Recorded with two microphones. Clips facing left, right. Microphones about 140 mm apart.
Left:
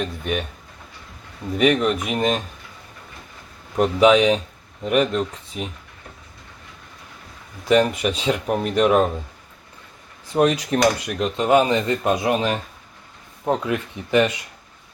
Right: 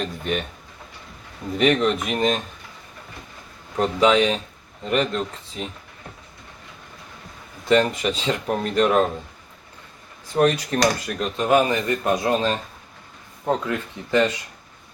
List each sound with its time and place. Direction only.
0.0 s speech: 5° left (ahead or behind)
1.5 s speech: 5° left (ahead or behind)
3.8 s speech: 15° left (ahead or behind)
7.7 s speech: 10° left (ahead or behind)
10.3 s speech: 10° left (ahead or behind)